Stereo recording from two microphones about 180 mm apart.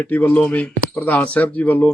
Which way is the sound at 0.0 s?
10° left (ahead or behind).